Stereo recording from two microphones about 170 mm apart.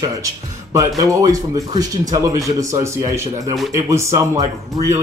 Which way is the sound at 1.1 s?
20° right (ahead or behind).